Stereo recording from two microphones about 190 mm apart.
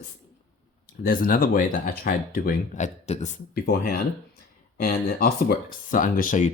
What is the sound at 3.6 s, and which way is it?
Speech, 55° left (ahead or behind).